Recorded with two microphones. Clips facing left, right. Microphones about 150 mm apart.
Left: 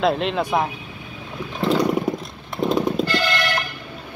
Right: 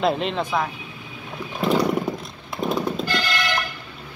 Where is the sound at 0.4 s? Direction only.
20° left (ahead or behind).